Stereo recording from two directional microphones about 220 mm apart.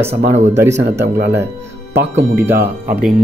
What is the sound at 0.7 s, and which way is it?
Speech, 50° right (ahead or behind).